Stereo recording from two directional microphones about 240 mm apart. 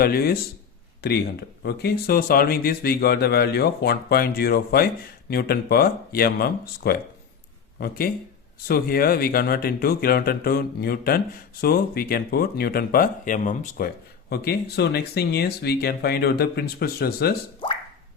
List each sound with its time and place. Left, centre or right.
0.0 s speech: left